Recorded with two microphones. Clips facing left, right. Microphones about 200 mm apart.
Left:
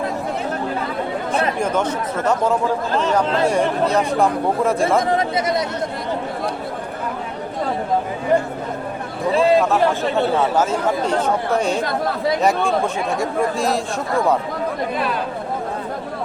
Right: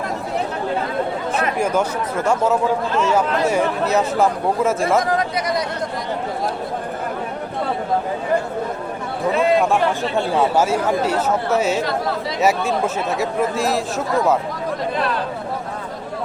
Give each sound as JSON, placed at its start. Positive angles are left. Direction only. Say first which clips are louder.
{"t": 1.5, "sound": "speech", "louder": "right 1 dB", "side_deg": -10}
{"t": 4.9, "sound": "speech", "louder": "left 1 dB", "side_deg": 25}
{"t": 9.3, "sound": "a man's voice", "louder": "left 2 dB", "side_deg": 30}
{"t": 10.3, "sound": "speech", "louder": "right 1 dB", "side_deg": -10}